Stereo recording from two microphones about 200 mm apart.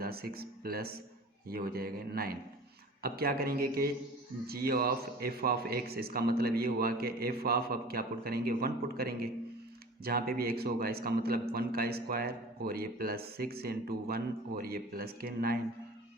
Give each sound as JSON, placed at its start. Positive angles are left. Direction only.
{"t": 0.0, "sound": "a man's voice", "side_deg": -50}